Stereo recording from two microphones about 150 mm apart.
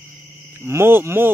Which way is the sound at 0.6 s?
15° right (ahead or behind).